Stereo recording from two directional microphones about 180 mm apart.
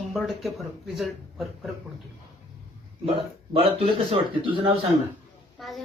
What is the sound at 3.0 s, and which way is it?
A man's voice, 30° right (ahead or behind).